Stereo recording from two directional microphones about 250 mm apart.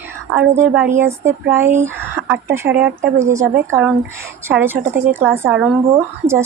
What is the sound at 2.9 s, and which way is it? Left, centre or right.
Speech, right.